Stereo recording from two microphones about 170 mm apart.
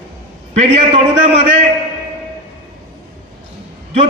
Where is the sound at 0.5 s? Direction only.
40° right (ahead or behind).